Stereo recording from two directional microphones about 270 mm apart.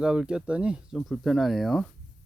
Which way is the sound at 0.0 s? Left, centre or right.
Centre.